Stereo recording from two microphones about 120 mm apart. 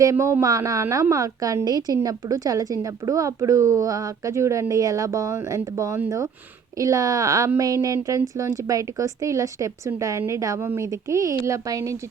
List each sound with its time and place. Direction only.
0.0 s a woman's voice: 25° right (ahead or behind)